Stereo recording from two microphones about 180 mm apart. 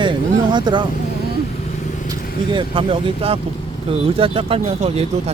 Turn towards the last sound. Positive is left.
turn(degrees=-35)  # may be behind; listen again after turning